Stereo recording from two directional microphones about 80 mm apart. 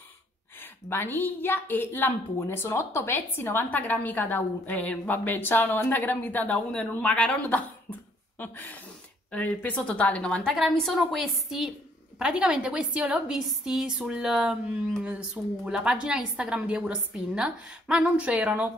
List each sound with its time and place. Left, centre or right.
0.6 s a woman's voice: left
7.9 s cough: centre
8.4 s a woman's voice: left
10.5 s a woman's voice: centre